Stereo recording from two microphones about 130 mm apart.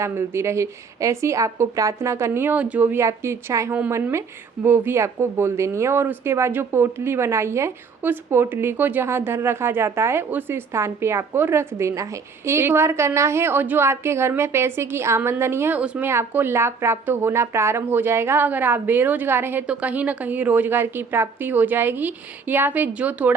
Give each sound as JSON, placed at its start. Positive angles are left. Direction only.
{"t": 0.0, "sound": "a woman's voice", "side_deg": -20}